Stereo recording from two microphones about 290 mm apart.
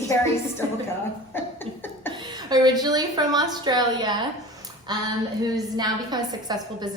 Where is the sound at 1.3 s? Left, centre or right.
Centre.